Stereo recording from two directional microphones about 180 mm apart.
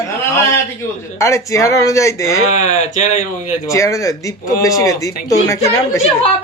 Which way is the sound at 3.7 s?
15° left (ahead or behind).